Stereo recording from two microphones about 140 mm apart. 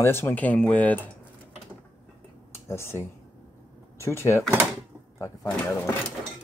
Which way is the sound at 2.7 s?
20° left (ahead or behind).